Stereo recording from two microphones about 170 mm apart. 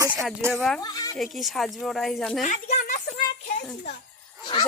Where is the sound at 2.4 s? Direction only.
45° left (ahead or behind).